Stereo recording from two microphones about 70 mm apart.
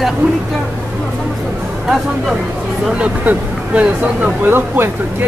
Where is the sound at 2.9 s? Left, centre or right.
Centre.